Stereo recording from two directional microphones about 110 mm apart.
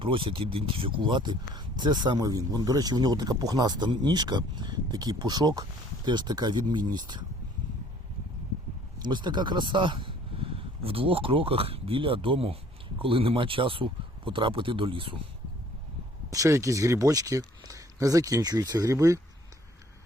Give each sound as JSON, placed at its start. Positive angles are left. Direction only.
{"t": 0.0, "sound": "speech", "side_deg": -50}
{"t": 9.0, "sound": "speech", "side_deg": -40}
{"t": 16.3, "sound": "speech", "side_deg": -30}